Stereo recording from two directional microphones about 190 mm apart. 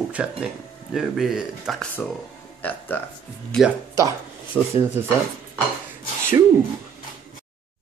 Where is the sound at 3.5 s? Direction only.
Centre (ahead or behind).